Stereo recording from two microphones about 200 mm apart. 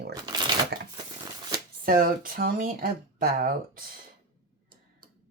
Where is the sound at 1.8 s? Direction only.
45° right (ahead or behind).